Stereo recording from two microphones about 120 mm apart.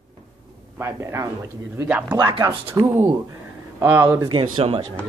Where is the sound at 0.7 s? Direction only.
20° right (ahead or behind).